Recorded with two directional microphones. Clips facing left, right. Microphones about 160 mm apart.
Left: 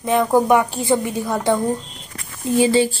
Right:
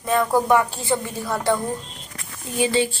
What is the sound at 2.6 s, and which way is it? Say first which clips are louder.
Speech: left 5 dB; 35° left (ahead or behind).